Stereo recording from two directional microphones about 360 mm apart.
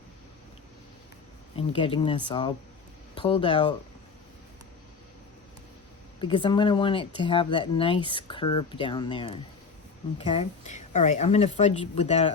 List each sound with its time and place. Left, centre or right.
1.5 s speech: centre
6.1 s speech: centre